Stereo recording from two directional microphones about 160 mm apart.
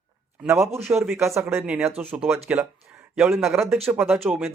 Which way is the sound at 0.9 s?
10° right (ahead or behind).